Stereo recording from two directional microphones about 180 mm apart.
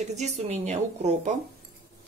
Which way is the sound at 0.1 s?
40° right (ahead or behind).